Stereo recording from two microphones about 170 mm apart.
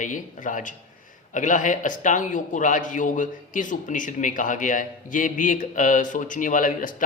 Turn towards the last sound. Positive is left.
turn(degrees=50)  # may be behind; listen again after turning